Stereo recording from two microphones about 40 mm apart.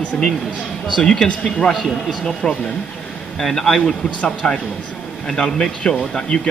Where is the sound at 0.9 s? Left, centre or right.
Centre.